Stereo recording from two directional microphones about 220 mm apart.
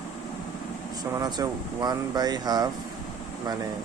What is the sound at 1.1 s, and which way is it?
A man's voice, 15° right (ahead or behind).